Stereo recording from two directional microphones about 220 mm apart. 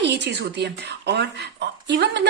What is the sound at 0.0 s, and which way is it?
A woman's voice, 50° right (ahead or behind).